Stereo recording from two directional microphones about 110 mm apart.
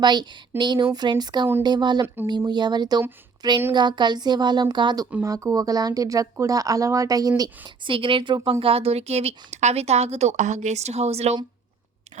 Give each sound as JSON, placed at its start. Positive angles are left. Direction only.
{"t": 0.0, "sound": "speech", "side_deg": -40}
{"t": 5.2, "sound": "speech", "side_deg": -30}
{"t": 7.9, "sound": "speech", "side_deg": -50}
{"t": 8.6, "sound": "speech", "side_deg": -60}
{"t": 12.2, "sound": "chewing", "side_deg": -90}